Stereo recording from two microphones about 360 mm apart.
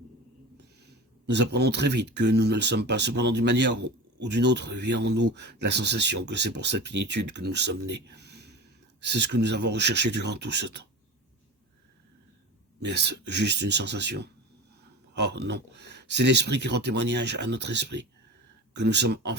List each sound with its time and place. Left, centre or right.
1.3 s speech: right
12.8 s speech: right